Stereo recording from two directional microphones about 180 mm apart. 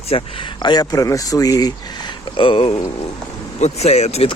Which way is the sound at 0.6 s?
20° left (ahead or behind).